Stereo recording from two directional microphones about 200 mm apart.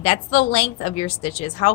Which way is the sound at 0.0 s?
30° left (ahead or behind).